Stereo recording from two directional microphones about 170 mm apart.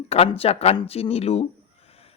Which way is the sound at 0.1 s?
35° left (ahead or behind).